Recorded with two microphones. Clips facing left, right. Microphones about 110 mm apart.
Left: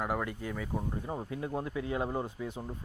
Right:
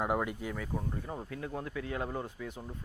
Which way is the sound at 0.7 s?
15° left (ahead or behind).